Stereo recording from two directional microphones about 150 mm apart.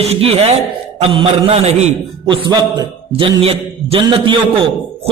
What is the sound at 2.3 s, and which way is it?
A man's voice, 30° right (ahead or behind).